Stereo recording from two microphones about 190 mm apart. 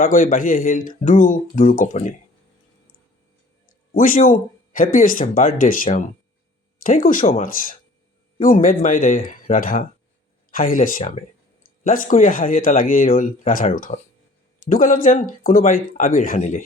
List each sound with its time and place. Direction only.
0.0 s speech: 45° left (ahead or behind)
3.9 s speech: 45° left (ahead or behind)